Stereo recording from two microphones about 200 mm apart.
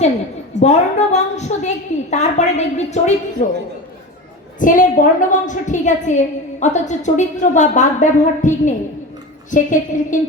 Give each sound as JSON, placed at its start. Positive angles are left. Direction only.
{"t": 0.6, "sound": "a woman's voice", "side_deg": 35}
{"t": 4.6, "sound": "a woman's voice", "side_deg": 40}